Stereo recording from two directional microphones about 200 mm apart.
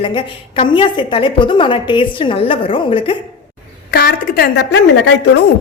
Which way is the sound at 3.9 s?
50° left (ahead or behind).